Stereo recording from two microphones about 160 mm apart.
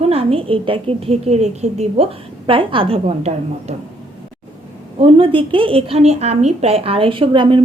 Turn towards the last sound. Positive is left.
turn(degrees=-30)  # may be behind; listen again after turning